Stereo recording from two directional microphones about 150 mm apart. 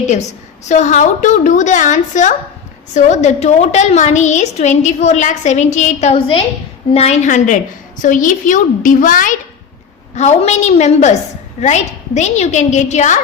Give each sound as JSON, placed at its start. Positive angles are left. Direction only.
{"t": 0.1, "sound": "a woman's voice", "side_deg": 50}
{"t": 10.2, "sound": "a woman's voice", "side_deg": 50}